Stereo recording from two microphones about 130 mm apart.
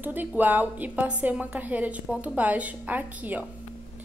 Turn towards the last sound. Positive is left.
turn(degrees=-10)  # may be behind; listen again after turning